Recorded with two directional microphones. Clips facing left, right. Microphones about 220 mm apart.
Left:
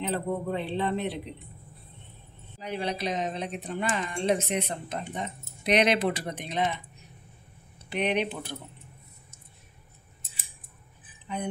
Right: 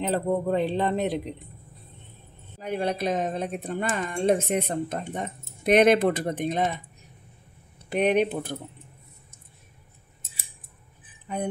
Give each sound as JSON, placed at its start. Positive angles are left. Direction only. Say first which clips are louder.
{"t": 0.1, "sound": "speech", "louder": "right 7 dB", "side_deg": -45}
{"t": 2.6, "sound": "speech", "louder": "right 4 dB", "side_deg": -50}